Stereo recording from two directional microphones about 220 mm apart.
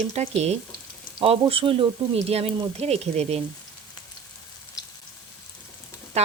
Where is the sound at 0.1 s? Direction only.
30° right (ahead or behind).